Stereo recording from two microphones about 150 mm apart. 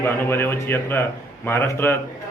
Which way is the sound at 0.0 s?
15° left (ahead or behind).